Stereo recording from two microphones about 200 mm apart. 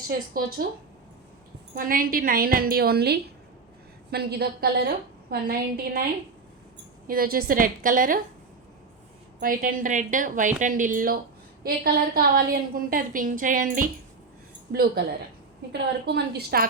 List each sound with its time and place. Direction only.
0.1 s a woman's voice: 50° right (ahead or behind)
1.7 s a woman's voice: 45° right (ahead or behind)
7.1 s a woman's voice: 45° right (ahead or behind)
9.4 s a woman's voice: 45° right (ahead or behind)